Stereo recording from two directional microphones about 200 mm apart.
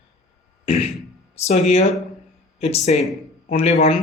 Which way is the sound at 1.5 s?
35° left (ahead or behind).